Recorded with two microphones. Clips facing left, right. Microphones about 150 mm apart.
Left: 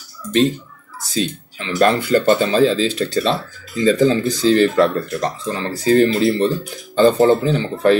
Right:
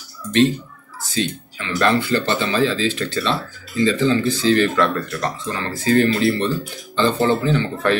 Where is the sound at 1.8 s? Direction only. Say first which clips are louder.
Left 3 dB; 45° left (ahead or behind).